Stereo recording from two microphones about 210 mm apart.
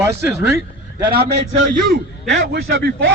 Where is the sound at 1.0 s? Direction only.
45° right (ahead or behind).